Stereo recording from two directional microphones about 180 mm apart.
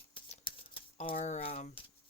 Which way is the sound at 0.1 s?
30° left (ahead or behind).